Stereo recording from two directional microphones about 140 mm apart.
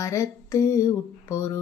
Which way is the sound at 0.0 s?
20° left (ahead or behind).